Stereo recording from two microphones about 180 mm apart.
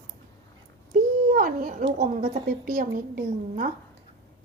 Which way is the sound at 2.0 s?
50° right (ahead or behind).